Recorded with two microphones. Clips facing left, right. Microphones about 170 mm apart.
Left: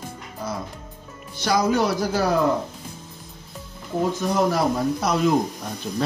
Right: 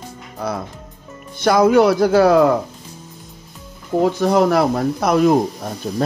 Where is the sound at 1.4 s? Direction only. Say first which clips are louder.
Right 8 dB; 55° right (ahead or behind).